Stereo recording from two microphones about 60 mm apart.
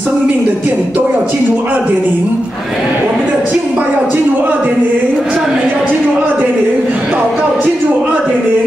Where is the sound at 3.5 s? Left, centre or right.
Right.